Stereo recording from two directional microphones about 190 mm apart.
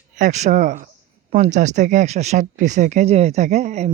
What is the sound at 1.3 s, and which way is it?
Speech, 40° right (ahead or behind).